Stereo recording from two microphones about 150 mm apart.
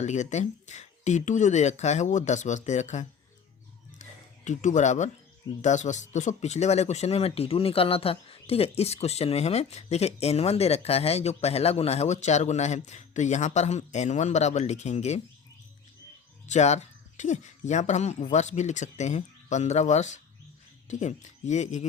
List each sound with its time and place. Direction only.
0.0 s speech: 50° left (ahead or behind)
4.4 s speech: 55° left (ahead or behind)
16.5 s speech: 50° left (ahead or behind)